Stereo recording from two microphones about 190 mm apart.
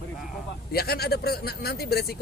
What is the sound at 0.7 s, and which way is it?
Speech, 55° left (ahead or behind).